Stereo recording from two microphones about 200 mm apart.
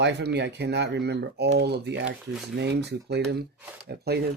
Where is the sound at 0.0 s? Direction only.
55° right (ahead or behind).